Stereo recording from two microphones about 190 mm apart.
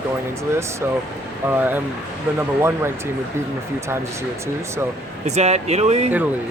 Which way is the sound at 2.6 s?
10° right (ahead or behind).